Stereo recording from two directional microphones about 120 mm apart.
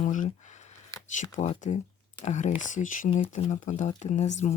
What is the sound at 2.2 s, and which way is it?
Speech, 85° left.